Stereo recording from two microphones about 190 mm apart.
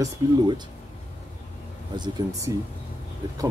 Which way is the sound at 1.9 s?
25° right (ahead or behind).